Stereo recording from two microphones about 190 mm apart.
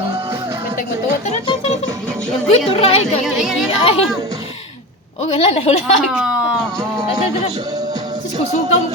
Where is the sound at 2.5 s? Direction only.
30° left (ahead or behind).